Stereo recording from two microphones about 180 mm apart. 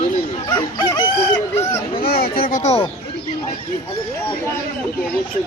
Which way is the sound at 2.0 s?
55° left (ahead or behind).